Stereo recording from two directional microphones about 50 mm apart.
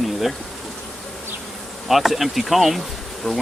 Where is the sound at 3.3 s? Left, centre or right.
Centre.